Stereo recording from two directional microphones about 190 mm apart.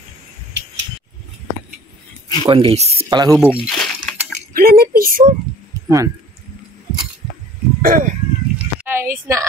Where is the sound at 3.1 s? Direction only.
20° right (ahead or behind).